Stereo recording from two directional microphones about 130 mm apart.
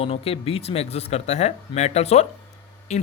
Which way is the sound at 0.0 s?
50° left (ahead or behind).